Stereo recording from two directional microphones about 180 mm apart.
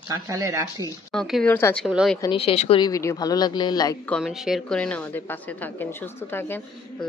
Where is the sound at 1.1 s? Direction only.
Centre (ahead or behind).